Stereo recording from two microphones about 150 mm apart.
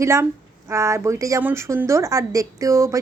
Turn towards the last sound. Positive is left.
turn(degrees=-20)  # may be behind; listen again after turning